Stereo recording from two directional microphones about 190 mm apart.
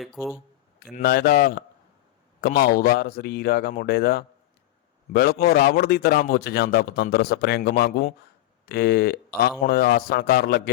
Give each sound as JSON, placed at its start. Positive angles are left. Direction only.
{"t": 0.0, "sound": "speech", "side_deg": 0}
{"t": 0.8, "sound": "a man's voice", "side_deg": 55}